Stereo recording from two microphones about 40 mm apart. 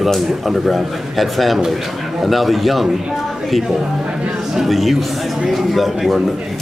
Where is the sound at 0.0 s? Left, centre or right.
Centre.